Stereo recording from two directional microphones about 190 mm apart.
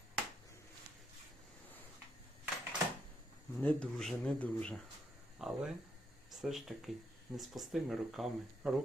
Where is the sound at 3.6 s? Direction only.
5° left (ahead or behind).